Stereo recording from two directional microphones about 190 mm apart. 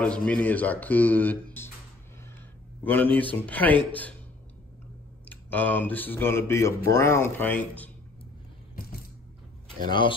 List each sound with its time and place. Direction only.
0.0 s speech: 5° left (ahead or behind)
2.8 s speech: 10° left (ahead or behind)
5.3 s speech: 10° left (ahead or behind)
9.8 s speech: 25° left (ahead or behind)